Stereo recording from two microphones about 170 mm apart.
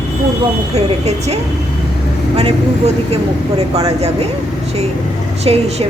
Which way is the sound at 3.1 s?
35° right (ahead or behind).